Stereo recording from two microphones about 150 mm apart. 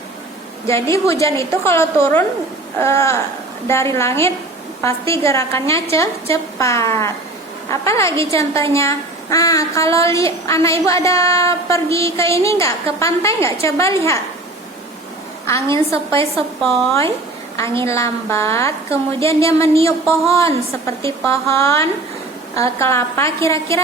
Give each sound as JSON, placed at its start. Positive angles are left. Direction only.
{"t": 0.7, "sound": "a woman's voice", "side_deg": 20}
{"t": 15.4, "sound": "a woman's voice", "side_deg": 20}
{"t": 17.7, "sound": "a woman's voice", "side_deg": 20}